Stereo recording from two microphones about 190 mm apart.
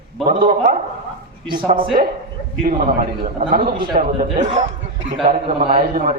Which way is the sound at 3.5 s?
50° right (ahead or behind).